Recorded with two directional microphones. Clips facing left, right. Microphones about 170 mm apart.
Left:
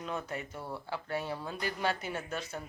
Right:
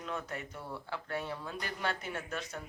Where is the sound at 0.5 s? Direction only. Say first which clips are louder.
Left 2 dB; 25° left (ahead or behind).